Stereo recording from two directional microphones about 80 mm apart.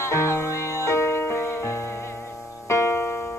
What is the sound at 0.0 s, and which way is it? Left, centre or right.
Music, left.